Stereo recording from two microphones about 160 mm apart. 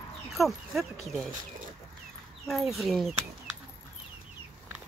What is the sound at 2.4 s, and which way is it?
Speech, centre (ahead or behind).